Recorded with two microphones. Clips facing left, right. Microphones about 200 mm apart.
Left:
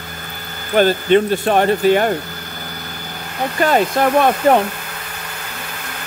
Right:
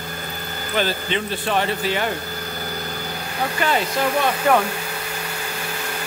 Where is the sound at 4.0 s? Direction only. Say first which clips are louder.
Left 4 dB; 60° left (ahead or behind).